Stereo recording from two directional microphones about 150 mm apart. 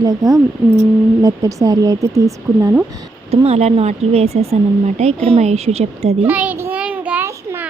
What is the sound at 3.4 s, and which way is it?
Speech, 45° right (ahead or behind).